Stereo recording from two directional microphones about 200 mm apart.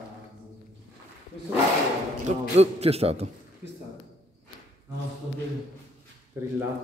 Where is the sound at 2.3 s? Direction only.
35° right (ahead or behind).